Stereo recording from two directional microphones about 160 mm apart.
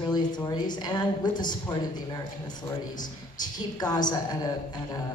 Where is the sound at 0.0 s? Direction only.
25° left (ahead or behind).